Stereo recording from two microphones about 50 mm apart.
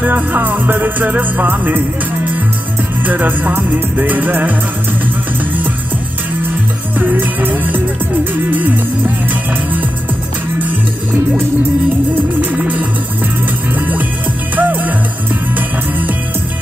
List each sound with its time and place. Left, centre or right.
0.0 s music: right
3.0 s music: right
7.0 s music: right
12.4 s music: right